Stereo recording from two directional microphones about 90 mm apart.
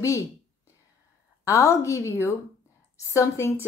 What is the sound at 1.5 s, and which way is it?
Speech, 35° left (ahead or behind).